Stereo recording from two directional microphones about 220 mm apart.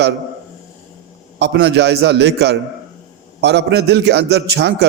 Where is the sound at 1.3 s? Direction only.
50° right (ahead or behind).